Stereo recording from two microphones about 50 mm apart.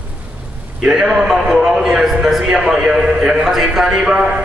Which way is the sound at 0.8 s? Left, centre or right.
Centre.